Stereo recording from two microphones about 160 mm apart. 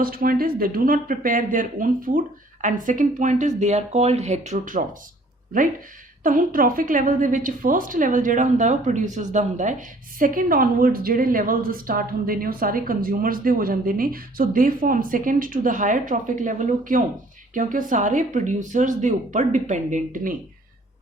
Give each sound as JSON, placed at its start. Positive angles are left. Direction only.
{"t": 0.0, "sound": "a woman's voice", "side_deg": -65}
{"t": 6.2, "sound": "a woman's voice", "side_deg": -55}